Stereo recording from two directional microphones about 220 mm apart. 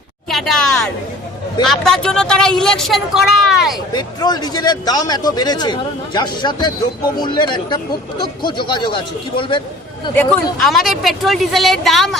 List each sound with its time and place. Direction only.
0.3 s a woman's voice: centre (ahead or behind)
3.9 s speech: 20° left (ahead or behind)
10.2 s a woman's voice: centre (ahead or behind)